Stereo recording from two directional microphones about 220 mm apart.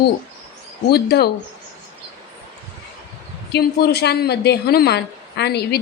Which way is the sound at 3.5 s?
45° left (ahead or behind).